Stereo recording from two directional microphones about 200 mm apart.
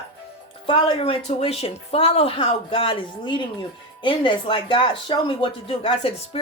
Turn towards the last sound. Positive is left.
turn(degrees=30)  # may be behind; listen again after turning